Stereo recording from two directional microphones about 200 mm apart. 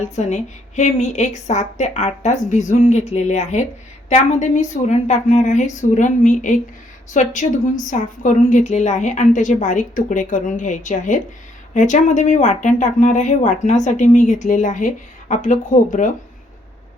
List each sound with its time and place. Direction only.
0.0 s speech: 35° left (ahead or behind)